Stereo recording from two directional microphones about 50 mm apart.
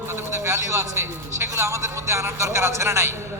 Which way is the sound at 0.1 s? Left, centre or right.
Right.